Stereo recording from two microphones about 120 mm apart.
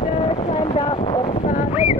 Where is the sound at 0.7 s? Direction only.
50° left (ahead or behind).